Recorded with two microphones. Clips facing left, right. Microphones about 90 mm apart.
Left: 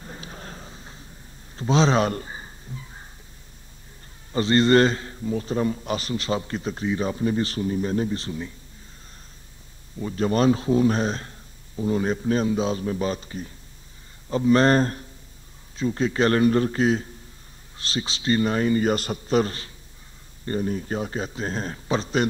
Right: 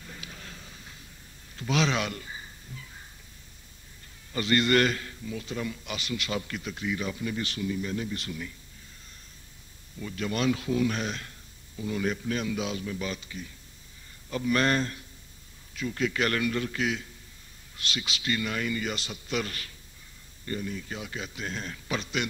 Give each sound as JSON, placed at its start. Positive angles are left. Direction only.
{"t": 0.0, "sound": "a sound", "side_deg": 35}
{"t": 4.3, "sound": "a man's voice", "side_deg": 30}
{"t": 9.9, "sound": "a man's voice", "side_deg": 35}